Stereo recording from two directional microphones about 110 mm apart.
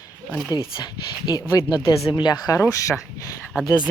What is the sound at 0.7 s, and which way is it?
Speech, 40° left (ahead or behind).